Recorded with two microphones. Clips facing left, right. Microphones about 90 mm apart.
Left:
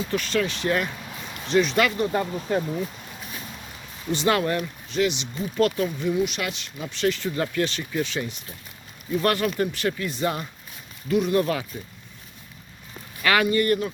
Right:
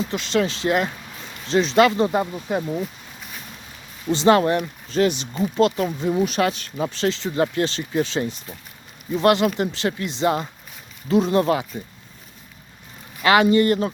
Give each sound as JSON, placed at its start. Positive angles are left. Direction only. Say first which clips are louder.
{"t": 0.1, "sound": "speech", "louder": "even", "side_deg": -20}
{"t": 2.5, "sound": "speech", "louder": "even", "side_deg": -15}
{"t": 4.1, "sound": "speech", "louder": "right 6 dB", "side_deg": -30}
{"t": 4.9, "sound": "speech", "louder": "right 4 dB", "side_deg": -40}
{"t": 5.4, "sound": "speech", "louder": "right 3 dB", "side_deg": -25}
{"t": 9.1, "sound": "speech", "louder": "right 5 dB", "side_deg": -20}
{"t": 13.2, "sound": "speech", "louder": "right 5 dB", "side_deg": -25}